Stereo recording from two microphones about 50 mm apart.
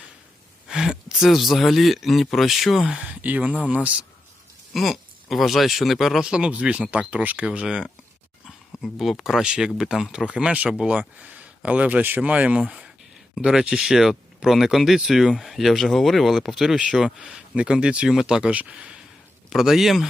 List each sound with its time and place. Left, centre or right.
0.7 s speech: centre
2.8 s speech: centre
3.1 s speech: right
4.7 s speech: centre
6.2 s speech: centre
7.4 s speech: centre
8.8 s speech: centre
10.2 s speech: right
15.3 s speech: centre
19.5 s speech: centre